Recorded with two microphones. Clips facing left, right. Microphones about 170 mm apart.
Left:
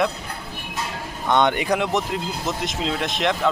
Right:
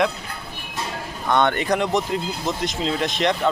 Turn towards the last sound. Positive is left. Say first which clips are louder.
# right 1 dB
turn(degrees=0)  # may be behind; listen again after turning